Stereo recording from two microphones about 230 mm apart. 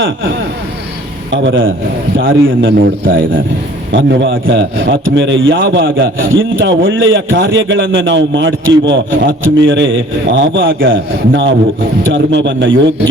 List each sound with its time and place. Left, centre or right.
1.3 s a man's voice: right
3.9 s a man's voice: right